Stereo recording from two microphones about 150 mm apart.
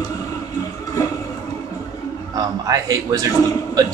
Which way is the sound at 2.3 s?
25° right (ahead or behind).